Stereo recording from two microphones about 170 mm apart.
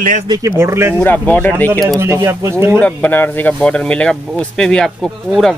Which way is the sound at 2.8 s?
10° left (ahead or behind).